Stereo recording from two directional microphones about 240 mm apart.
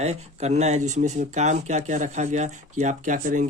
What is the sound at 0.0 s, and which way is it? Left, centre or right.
Speech, right.